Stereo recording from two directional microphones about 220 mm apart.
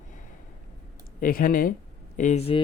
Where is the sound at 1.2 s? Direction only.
40° left (ahead or behind).